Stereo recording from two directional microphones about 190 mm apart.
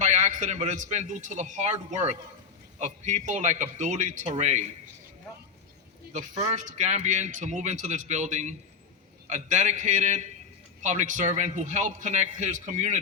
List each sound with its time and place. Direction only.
0.0 s a man's voice: 40° right (ahead or behind)
6.1 s a man's voice: 35° right (ahead or behind)